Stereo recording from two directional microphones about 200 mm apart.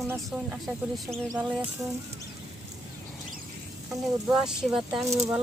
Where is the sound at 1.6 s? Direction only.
10° right (ahead or behind).